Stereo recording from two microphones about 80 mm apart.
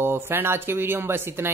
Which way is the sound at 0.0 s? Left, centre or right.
Right.